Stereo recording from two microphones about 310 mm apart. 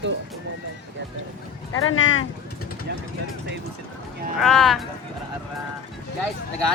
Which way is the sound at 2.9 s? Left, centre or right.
Right.